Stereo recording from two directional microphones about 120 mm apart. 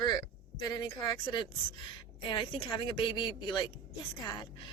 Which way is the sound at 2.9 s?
40° left (ahead or behind).